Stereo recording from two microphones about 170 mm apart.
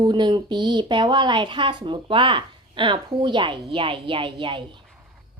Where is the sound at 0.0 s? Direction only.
25° right (ahead or behind).